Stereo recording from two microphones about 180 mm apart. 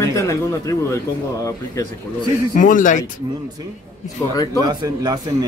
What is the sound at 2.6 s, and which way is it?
Speech, 45° left (ahead or behind).